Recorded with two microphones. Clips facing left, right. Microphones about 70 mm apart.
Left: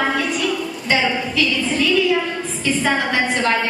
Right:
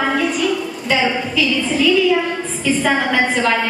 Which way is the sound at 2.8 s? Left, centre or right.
Centre.